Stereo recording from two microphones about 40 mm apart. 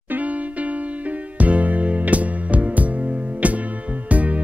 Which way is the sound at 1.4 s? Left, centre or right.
Right.